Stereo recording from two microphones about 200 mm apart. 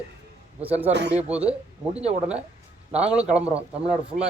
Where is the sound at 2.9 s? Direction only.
5° right (ahead or behind).